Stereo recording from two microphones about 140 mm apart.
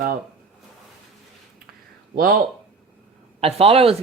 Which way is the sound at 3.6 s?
45° right (ahead or behind).